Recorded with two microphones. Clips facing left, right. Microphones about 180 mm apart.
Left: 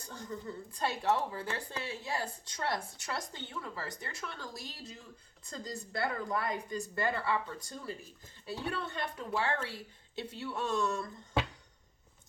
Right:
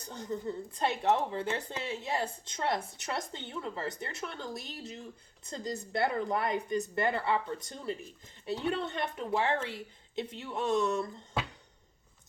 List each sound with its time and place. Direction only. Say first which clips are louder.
0.1 s speech: right 6 dB; 25° right (ahead or behind)